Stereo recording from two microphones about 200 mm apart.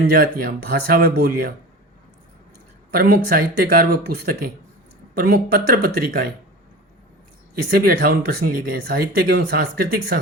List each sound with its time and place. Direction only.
0.1 s speech: 50° right (ahead or behind)
2.9 s speech: 50° right (ahead or behind)
7.7 s speech: 45° right (ahead or behind)